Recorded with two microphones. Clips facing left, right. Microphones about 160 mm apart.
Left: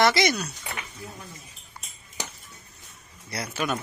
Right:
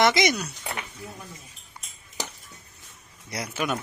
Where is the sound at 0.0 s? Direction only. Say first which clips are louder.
Even; 20° right (ahead or behind).